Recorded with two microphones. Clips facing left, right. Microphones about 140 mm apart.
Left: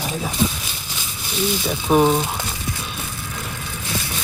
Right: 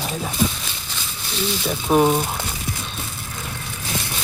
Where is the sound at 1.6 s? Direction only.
Centre (ahead or behind).